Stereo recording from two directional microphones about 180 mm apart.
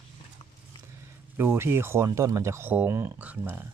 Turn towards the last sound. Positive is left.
turn(degrees=-10)  # may be behind; listen again after turning